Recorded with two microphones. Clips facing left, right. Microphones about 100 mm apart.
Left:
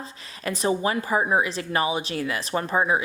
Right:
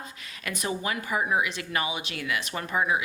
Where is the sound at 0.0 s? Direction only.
30° left (ahead or behind).